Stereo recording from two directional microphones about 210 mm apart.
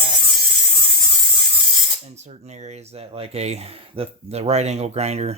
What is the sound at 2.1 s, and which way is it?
Speech, 30° right (ahead or behind).